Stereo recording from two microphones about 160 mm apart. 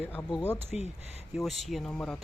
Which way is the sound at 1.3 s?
Centre (ahead or behind).